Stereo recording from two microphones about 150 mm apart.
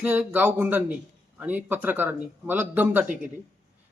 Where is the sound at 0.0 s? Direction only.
10° right (ahead or behind).